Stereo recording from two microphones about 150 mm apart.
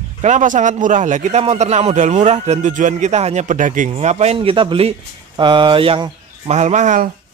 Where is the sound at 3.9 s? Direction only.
45° right (ahead or behind).